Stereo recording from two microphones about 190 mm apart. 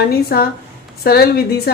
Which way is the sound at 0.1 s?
55° left (ahead or behind).